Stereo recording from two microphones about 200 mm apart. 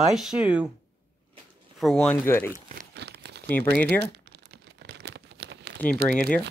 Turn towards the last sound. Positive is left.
turn(degrees=5)  # may be behind; listen again after turning